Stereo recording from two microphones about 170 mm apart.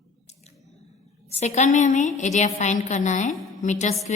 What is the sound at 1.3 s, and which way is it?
A woman's voice, 40° left (ahead or behind).